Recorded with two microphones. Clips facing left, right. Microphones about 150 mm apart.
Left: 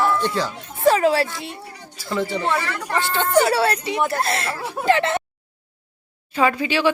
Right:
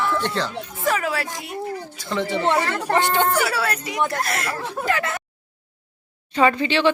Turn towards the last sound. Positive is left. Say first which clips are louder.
# right 1 dB
turn(degrees=10)  # may be behind; listen again after turning